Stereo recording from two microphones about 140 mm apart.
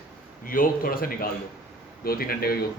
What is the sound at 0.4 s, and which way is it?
Speech, 85° left.